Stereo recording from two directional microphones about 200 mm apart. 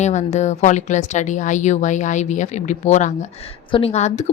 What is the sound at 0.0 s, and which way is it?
A woman's voice, 35° left (ahead or behind).